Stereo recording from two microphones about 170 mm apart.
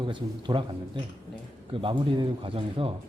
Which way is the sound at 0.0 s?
30° right (ahead or behind).